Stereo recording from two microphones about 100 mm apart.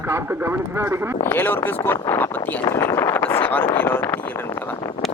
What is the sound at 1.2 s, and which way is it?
Speech, 20° left (ahead or behind).